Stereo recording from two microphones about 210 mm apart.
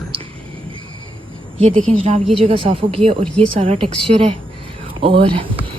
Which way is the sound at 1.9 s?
30° right (ahead or behind).